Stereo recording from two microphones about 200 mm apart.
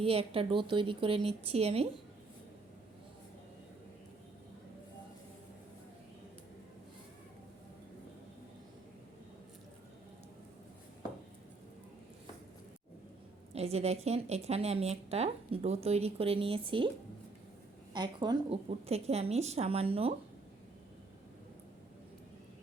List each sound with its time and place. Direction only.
0.0 s a woman's voice: 30° right (ahead or behind)
13.5 s a woman's voice: 30° right (ahead or behind)
17.9 s a woman's voice: 20° right (ahead or behind)